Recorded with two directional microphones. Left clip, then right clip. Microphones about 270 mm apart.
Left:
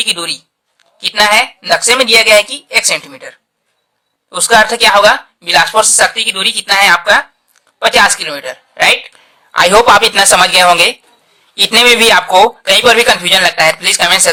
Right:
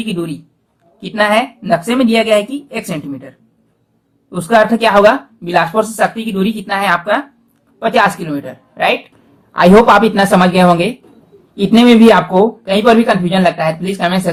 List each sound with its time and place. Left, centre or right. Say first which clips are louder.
0.0 s a woman's voice: left 7 dB; left